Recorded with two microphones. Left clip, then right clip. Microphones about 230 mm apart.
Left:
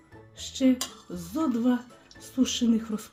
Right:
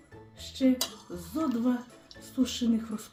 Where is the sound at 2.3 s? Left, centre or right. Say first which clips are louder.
Left 3 dB; left.